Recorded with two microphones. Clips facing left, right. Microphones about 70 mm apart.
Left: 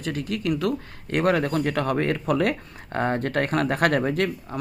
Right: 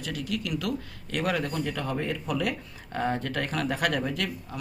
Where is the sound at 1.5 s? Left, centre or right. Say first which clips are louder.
Left 7 dB; left.